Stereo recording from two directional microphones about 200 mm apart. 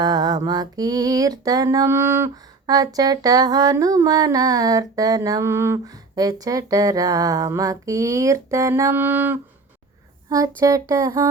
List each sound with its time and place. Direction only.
0.0 s music: 20° right (ahead or behind)
10.2 s speech: 15° right (ahead or behind)
10.6 s music: 15° right (ahead or behind)